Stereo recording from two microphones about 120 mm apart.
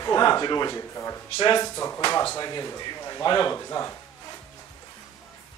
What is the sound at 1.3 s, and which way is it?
Speech, 40° left (ahead or behind).